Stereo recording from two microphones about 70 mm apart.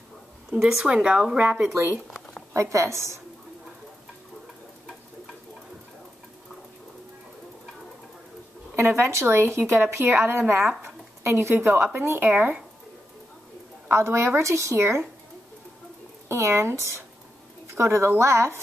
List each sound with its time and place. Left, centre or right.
0.5 s a woman's voice: centre
2.1 s a sound: centre
2.5 s a woman's voice: right
8.7 s speech: right
13.8 s speech: right
16.3 s speech: right